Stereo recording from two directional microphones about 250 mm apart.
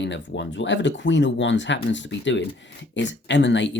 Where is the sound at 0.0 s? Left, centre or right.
Left.